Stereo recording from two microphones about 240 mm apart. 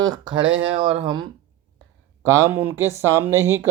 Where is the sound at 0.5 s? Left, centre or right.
Right.